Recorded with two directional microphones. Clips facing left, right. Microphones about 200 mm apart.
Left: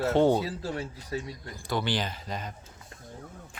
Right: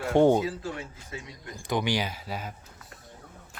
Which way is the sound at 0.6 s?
35° left (ahead or behind).